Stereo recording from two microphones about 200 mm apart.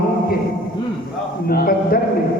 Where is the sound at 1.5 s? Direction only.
50° left (ahead or behind).